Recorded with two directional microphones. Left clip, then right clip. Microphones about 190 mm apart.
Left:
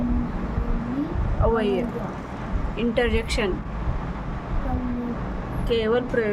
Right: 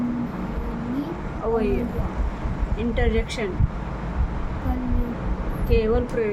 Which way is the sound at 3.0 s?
30° left (ahead or behind).